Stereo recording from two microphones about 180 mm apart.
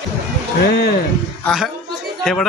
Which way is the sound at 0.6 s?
65° left (ahead or behind).